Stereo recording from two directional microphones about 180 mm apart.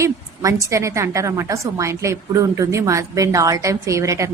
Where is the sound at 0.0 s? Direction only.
15° right (ahead or behind).